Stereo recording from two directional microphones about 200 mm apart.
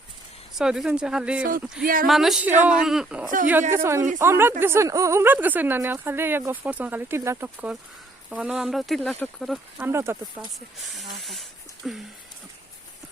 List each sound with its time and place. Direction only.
0.6 s speech: 5° right (ahead or behind)
1.8 s speech: 45° right (ahead or behind)
2.0 s speech: centre (ahead or behind)
3.8 s speech: 15° right (ahead or behind)
10.8 s speech: centre (ahead or behind)